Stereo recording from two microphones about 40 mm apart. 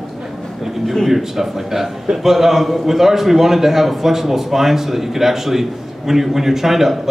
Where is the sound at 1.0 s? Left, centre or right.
Centre.